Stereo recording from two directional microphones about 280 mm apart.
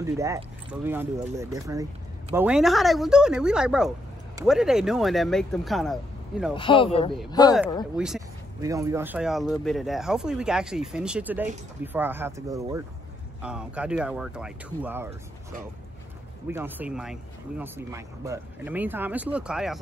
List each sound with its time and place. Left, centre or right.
0.0 s speech: centre
6.5 s speech: centre
7.9 s speech: centre
16.4 s speech: centre